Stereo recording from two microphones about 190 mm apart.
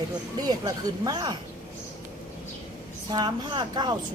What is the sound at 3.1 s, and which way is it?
Speech, 25° right (ahead or behind).